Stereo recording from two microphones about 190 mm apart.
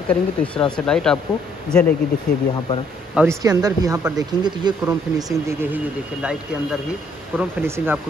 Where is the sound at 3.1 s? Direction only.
5° right (ahead or behind).